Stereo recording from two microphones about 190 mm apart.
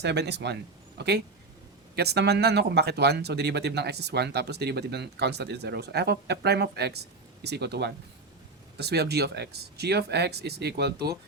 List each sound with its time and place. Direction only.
0.0 s speech: 65° right (ahead or behind)